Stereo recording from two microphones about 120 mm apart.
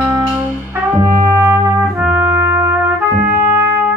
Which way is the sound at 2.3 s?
20° right (ahead or behind).